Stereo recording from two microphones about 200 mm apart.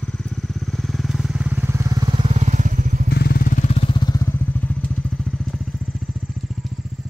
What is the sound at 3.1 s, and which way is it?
Vehicle, 55° left (ahead or behind).